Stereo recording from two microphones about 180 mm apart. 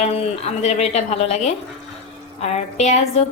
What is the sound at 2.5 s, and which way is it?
Speech, 40° left (ahead or behind).